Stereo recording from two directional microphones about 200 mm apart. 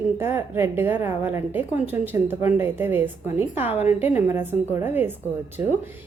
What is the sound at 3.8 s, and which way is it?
Speech, 35° left (ahead or behind).